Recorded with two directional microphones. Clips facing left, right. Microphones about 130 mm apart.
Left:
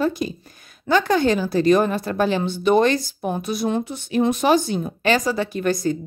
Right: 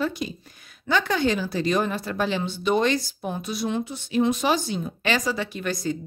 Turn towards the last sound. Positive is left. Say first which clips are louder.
# left 6 dB
turn(degrees=45)  # may be behind; listen again after turning